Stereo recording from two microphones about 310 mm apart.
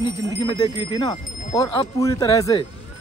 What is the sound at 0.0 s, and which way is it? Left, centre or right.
Speech, centre.